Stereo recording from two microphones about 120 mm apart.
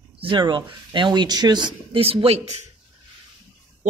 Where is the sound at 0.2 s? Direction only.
40° right (ahead or behind).